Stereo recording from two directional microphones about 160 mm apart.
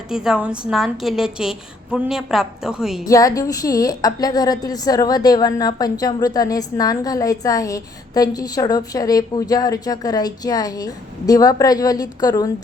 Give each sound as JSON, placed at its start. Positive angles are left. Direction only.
{"t": 0.1, "sound": "a woman's voice", "side_deg": -5}
{"t": 3.1, "sound": "a woman's voice", "side_deg": 20}